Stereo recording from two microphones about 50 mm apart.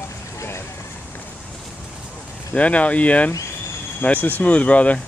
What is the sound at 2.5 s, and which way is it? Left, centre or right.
Speech, left.